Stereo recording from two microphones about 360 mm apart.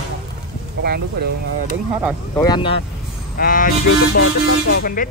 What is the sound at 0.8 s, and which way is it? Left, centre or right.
Speech, right.